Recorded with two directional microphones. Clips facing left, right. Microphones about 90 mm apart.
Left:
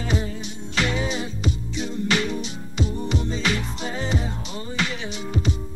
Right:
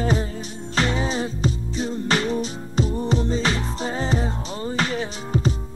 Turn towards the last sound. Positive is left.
turn(degrees=-40)  # may be behind; listen again after turning